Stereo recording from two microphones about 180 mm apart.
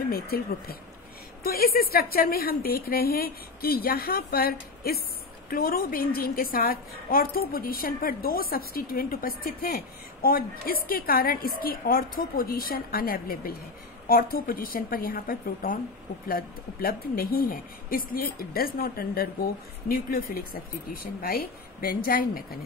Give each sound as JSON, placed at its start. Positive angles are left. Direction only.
{"t": 0.1, "sound": "a woman's voice", "side_deg": 55}